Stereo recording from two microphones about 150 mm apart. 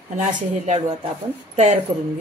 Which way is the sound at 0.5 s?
50° right (ahead or behind).